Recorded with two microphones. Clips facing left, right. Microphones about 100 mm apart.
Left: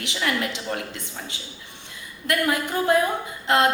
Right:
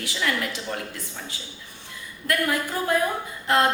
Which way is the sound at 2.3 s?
20° left (ahead or behind).